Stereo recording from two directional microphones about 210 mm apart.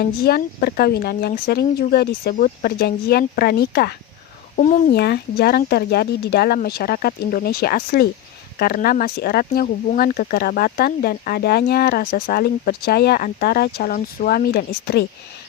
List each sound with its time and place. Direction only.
0.0 s speech: 45° left (ahead or behind)
4.5 s speech: 35° left (ahead or behind)
4.9 s speech: 50° left (ahead or behind)